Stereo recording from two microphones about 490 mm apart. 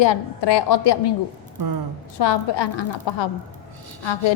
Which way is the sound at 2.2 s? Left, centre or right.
Left.